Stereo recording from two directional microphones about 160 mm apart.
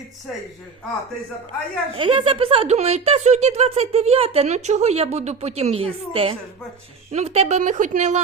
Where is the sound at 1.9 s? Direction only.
35° right (ahead or behind).